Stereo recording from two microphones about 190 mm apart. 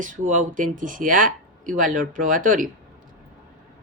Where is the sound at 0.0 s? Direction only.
45° right (ahead or behind).